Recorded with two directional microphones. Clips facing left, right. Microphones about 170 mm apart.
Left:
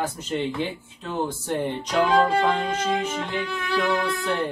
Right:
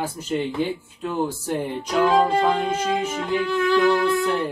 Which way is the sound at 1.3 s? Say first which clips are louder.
Even; centre (ahead or behind).